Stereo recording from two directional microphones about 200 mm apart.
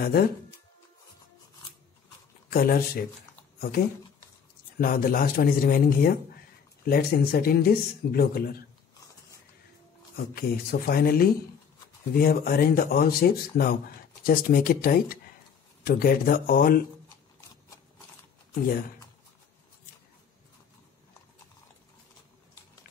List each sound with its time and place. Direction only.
0.0 s speech: 50° left (ahead or behind)
2.5 s speech: 45° left (ahead or behind)
4.7 s speech: 45° left (ahead or behind)
10.1 s speech: 50° left (ahead or behind)
18.5 s speech: 45° left (ahead or behind)